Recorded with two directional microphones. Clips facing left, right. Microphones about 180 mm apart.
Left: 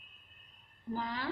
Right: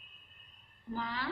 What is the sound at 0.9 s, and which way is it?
Speech, 40° left (ahead or behind).